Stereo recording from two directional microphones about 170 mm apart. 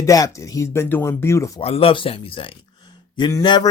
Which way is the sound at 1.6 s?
35° left (ahead or behind).